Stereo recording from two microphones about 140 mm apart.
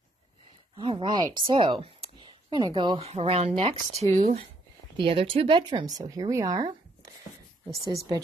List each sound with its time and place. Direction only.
0.7 s speech: 35° right (ahead or behind)
3.1 s speech: 50° right (ahead or behind)
4.9 s speech: 40° right (ahead or behind); by 6.6 s 25° right (ahead or behind)